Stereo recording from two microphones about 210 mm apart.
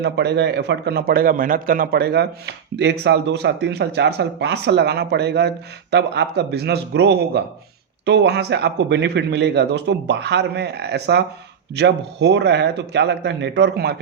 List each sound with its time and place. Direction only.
0.0 s a man's voice: 55° right (ahead or behind)